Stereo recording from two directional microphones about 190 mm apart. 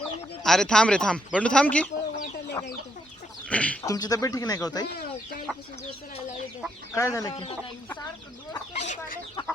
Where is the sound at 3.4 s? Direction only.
5° left (ahead or behind).